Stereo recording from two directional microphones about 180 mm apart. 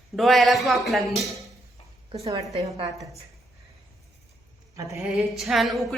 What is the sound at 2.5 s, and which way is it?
Speech, 25° right (ahead or behind).